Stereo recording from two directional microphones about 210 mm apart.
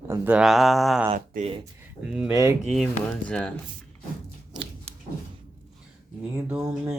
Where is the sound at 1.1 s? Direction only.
30° right (ahead or behind).